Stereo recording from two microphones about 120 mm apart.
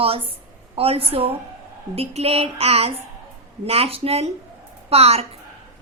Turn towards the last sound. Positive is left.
turn(degrees=-55)  # may be behind; listen again after turning